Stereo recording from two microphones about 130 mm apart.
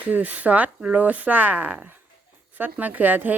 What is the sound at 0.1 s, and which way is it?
Speech, 10° right (ahead or behind).